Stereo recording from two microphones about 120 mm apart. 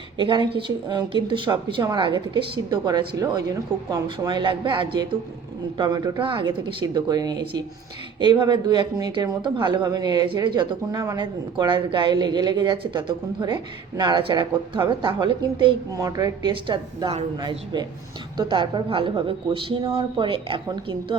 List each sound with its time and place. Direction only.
0.2 s speech: 40° right (ahead or behind)
15.9 s speech: 30° right (ahead or behind)
16.5 s a woman's voice: 45° right (ahead or behind)
18.3 s a woman's voice: 40° right (ahead or behind)